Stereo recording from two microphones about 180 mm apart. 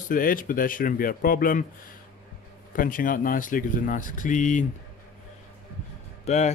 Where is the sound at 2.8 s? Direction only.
50° left (ahead or behind).